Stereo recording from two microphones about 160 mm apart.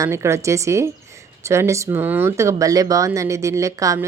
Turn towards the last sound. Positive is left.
turn(degrees=-20)  # may be behind; listen again after turning